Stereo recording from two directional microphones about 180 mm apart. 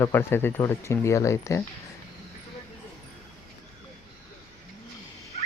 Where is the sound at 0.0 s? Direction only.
15° left (ahead or behind).